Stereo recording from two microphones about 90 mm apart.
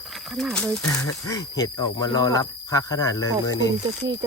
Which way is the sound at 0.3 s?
5° left (ahead or behind).